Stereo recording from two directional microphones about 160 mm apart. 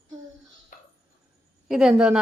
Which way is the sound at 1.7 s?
5° right (ahead or behind).